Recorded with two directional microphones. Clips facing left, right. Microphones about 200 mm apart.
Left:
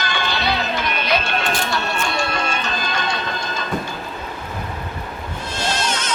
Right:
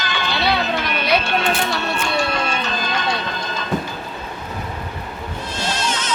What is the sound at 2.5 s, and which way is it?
Music, 50° left (ahead or behind).